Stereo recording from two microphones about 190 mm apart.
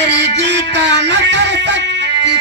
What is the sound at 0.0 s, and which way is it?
Music, 65° right (ahead or behind).